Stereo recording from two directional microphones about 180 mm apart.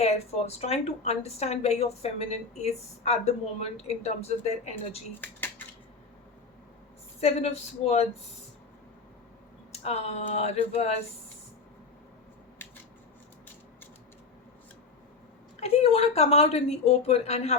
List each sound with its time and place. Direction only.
0.0 s speech: 35° left (ahead or behind)
5.2 s a sound: 10° left (ahead or behind)
7.2 s speech: 35° left (ahead or behind)
9.7 s speech: 35° left (ahead or behind)
15.6 s speech: 35° left (ahead or behind)